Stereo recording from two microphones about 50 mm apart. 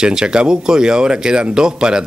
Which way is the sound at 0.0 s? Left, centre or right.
Centre.